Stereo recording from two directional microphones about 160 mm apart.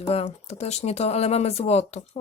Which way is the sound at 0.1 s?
40° left (ahead or behind).